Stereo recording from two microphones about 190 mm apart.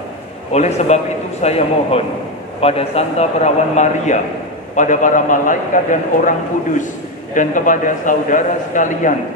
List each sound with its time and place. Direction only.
0.5 s a man's voice: 35° left (ahead or behind)
7.3 s a man's voice: 45° left (ahead or behind)